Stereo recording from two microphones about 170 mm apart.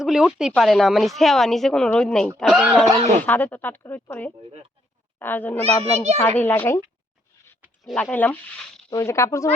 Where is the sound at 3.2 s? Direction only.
10° left (ahead or behind).